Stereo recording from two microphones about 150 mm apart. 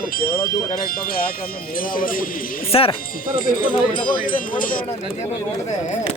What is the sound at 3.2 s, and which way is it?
Speech, 70° left (ahead or behind).